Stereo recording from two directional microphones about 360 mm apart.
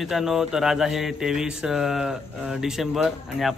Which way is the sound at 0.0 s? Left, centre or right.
Centre.